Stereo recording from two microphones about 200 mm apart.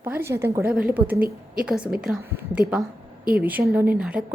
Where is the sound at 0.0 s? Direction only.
10° right (ahead or behind).